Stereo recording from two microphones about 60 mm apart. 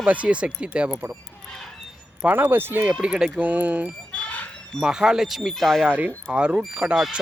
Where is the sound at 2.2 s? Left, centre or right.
Right.